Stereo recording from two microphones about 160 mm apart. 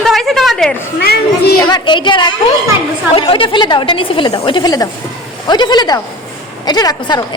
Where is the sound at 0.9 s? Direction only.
85° left.